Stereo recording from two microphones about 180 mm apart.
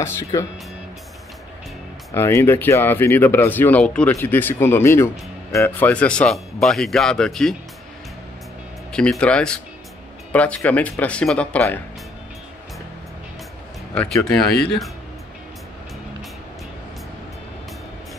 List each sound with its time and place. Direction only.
0.0 s speech: 15° left (ahead or behind)
2.1 s speech: 15° left (ahead or behind)
8.9 s speech: 5° left (ahead or behind)
13.9 s speech: 5° left (ahead or behind)